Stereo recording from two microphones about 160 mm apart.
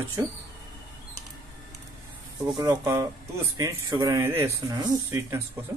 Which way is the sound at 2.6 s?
25° right (ahead or behind).